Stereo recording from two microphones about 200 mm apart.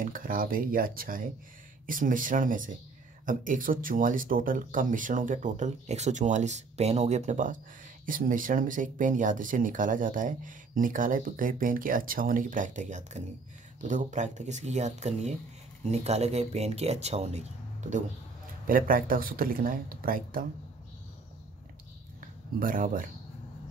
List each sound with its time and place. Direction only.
0.0 s speech: 45° right (ahead or behind)
18.7 s speech: 45° right (ahead or behind)
22.2 s a sound: 45° right (ahead or behind)